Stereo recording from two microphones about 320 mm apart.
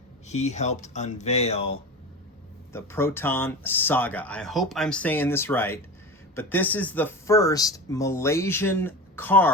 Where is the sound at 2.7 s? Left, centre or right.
Centre.